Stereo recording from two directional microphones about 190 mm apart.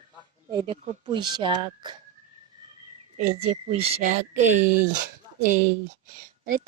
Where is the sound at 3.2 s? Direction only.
35° right (ahead or behind).